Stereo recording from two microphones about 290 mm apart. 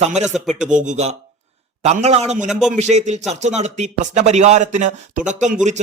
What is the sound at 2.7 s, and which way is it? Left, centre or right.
A man's voice, right.